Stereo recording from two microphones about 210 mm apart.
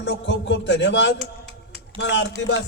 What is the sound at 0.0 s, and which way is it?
A man's voice, 60° left (ahead or behind).